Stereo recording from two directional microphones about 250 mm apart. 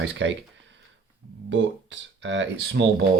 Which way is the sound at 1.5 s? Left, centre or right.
Right.